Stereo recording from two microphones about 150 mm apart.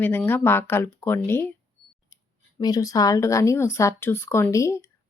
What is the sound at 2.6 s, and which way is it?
Speech, 25° left (ahead or behind).